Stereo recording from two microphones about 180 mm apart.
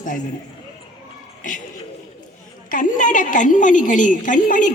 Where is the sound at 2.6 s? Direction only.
45° left (ahead or behind).